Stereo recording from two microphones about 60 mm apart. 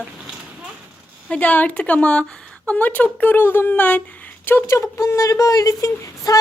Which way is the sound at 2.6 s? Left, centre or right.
Left.